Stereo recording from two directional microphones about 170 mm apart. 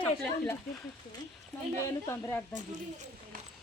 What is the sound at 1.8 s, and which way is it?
Speech, 15° left (ahead or behind).